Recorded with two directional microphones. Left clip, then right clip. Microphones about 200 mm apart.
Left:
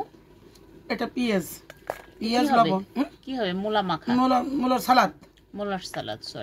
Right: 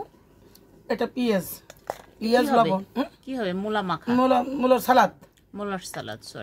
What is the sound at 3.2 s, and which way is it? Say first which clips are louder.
Speech: left 1 dB; centre (ahead or behind).